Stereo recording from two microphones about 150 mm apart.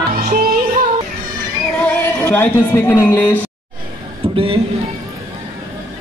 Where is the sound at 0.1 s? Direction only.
75° right (ahead or behind).